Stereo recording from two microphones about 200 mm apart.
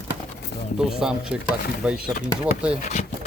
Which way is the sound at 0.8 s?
5° right (ahead or behind).